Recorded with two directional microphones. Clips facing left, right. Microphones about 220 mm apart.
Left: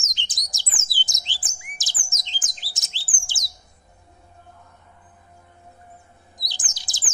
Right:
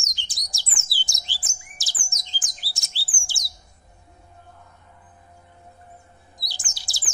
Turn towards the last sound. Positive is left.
turn(degrees=20)  # may be behind; listen again after turning